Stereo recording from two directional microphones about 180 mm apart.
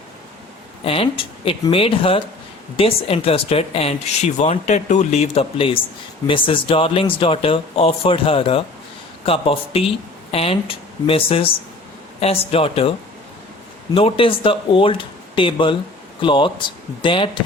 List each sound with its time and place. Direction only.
0.9 s speech: 30° left (ahead or behind)
13.9 s speech: 30° left (ahead or behind)